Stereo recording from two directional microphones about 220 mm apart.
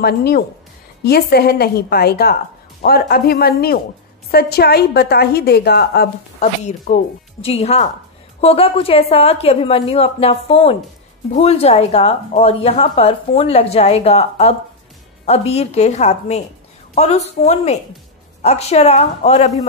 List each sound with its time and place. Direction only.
0.0 s a woman's voice: 45° left (ahead or behind)
6.4 s a woman's voice: 30° left (ahead or behind)